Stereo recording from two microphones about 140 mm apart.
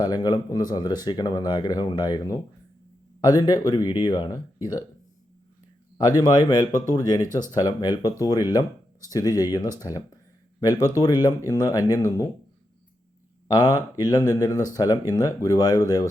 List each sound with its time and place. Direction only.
0.0 s speech: 30° left (ahead or behind)
6.0 s speech: 30° left (ahead or behind)
13.5 s speech: 30° left (ahead or behind)